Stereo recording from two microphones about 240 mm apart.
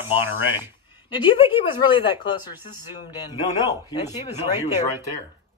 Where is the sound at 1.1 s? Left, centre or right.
Left.